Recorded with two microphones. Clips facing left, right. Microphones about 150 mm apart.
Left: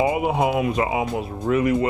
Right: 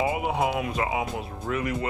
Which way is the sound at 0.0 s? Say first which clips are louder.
Left 5 dB; 15° left (ahead or behind).